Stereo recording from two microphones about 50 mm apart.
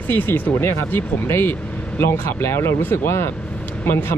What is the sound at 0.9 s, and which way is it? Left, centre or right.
Speech, left.